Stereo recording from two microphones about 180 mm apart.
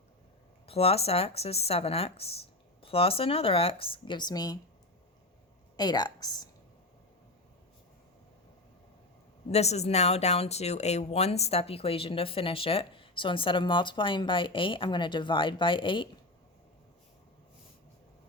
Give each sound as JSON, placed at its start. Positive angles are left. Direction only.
{"t": 0.7, "sound": "speech", "side_deg": 35}
{"t": 5.7, "sound": "a woman's voice", "side_deg": 25}
{"t": 9.5, "sound": "speech", "side_deg": 35}